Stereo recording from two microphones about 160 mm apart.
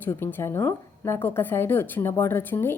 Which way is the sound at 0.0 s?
15° left (ahead or behind).